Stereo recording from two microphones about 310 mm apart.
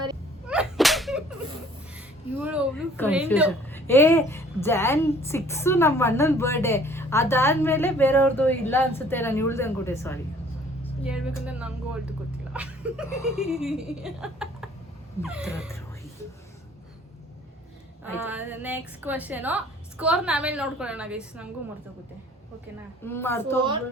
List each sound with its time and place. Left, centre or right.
0.4 s whip: centre
2.4 s a woman's voice: centre
11.0 s a woman's voice: centre
18.0 s a woman's voice: centre
23.0 s a woman's voice: centre